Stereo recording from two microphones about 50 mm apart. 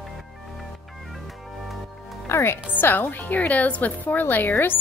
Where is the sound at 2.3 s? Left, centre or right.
Left.